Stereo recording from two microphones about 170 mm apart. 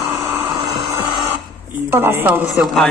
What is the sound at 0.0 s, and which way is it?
Vehicle, 20° right (ahead or behind).